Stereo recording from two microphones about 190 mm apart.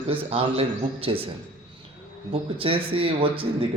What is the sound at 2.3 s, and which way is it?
A man's voice, 30° right (ahead or behind).